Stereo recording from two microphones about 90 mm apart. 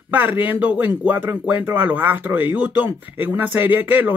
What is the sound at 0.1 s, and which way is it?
Speech, 20° right (ahead or behind).